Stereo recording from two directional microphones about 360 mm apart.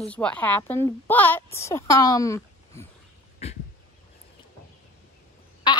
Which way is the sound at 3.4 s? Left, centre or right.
Centre.